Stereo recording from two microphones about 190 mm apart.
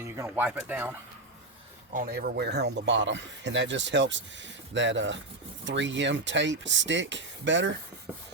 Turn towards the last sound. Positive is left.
turn(degrees=-70)  # may be behind; listen again after turning